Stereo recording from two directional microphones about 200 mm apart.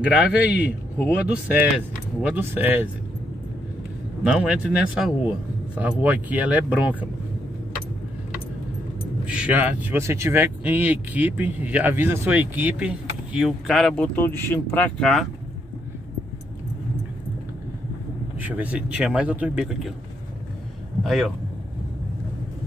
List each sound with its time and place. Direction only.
0.1 s speech: 5° right (ahead or behind)
4.2 s speech: 5° right (ahead or behind)
9.2 s speech: 5° right (ahead or behind)
18.4 s speech: 10° right (ahead or behind)
21.0 s speech: centre (ahead or behind)